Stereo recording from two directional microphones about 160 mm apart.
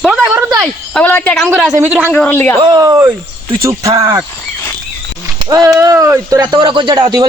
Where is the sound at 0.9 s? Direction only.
10° left (ahead or behind).